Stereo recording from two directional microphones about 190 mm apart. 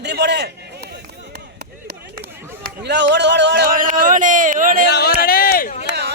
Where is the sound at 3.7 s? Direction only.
45° right (ahead or behind).